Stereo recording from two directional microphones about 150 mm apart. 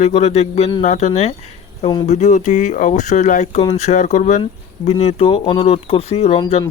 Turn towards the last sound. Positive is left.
turn(degrees=40)  # may be behind; listen again after turning